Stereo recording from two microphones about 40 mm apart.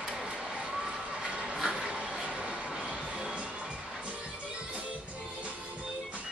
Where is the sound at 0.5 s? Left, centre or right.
Centre.